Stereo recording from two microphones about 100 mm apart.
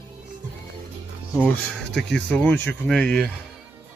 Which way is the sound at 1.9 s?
10° left (ahead or behind).